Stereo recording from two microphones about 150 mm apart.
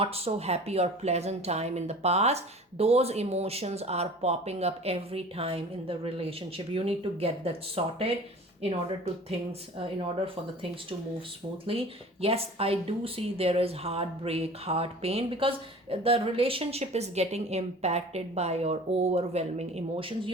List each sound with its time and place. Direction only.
0.0 s speech: 40° right (ahead or behind)
9.5 s speech: 35° right (ahead or behind)